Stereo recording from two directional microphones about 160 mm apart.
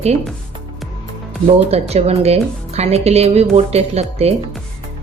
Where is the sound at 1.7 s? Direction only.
40° right (ahead or behind).